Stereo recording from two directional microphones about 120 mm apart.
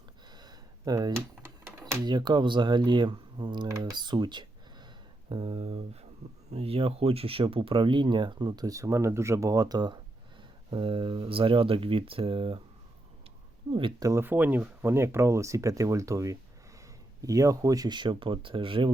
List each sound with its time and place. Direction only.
0.3 s a sound: 35° right (ahead or behind)
1.1 s typing: 20° right (ahead or behind)
2.0 s speech: 40° right (ahead or behind)
3.9 s a sound: 40° right (ahead or behind)
5.3 s speech: 45° right (ahead or behind)
13.7 s speech: 45° right (ahead or behind)
14.0 s speech: 25° right (ahead or behind)
14.3 s speech: 15° right (ahead or behind); by 18.9 s 45° right (ahead or behind)